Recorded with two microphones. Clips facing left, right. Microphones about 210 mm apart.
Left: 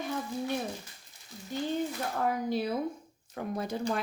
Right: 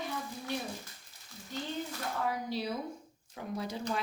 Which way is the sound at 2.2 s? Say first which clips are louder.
Left 5 dB; 50° left (ahead or behind).